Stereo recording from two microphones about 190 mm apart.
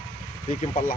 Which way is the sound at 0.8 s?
45° left (ahead or behind).